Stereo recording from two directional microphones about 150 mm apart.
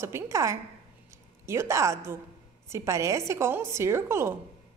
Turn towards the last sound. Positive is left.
turn(degrees=-15)  # may be behind; listen again after turning